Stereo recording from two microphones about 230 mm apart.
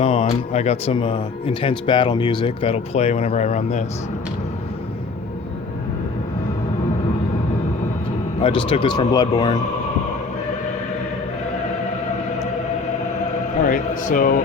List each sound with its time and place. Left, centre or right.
0.0 s speech: left
8.4 s speech: left
13.6 s speech: left